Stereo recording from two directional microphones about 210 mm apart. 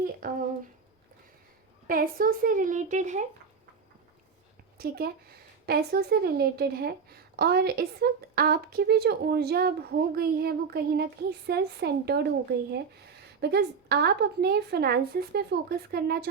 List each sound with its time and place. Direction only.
0.2 s a woman's voice: 45° right (ahead or behind)
1.9 s speech: 45° right (ahead or behind)
4.8 s a woman's voice: 50° right (ahead or behind)